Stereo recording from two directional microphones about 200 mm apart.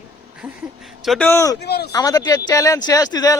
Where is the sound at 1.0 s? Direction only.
Centre (ahead or behind).